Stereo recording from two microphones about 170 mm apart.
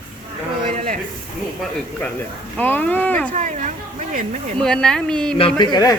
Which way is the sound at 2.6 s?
10° left (ahead or behind).